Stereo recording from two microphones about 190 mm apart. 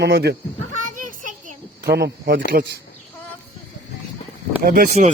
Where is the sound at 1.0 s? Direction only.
45° right (ahead or behind); by 2.4 s 60° right (ahead or behind).